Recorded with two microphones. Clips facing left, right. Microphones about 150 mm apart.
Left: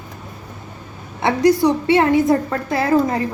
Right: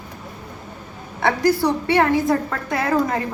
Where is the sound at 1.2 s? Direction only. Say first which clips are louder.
Left 3 dB; 20° left (ahead or behind).